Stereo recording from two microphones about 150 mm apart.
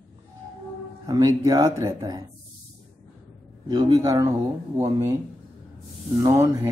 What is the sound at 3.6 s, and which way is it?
Speech, 30° right (ahead or behind).